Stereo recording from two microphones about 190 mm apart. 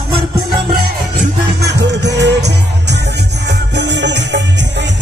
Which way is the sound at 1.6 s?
65° right (ahead or behind).